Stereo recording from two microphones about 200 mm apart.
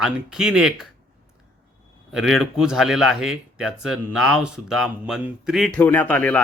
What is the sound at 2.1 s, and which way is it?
Speech, centre (ahead or behind).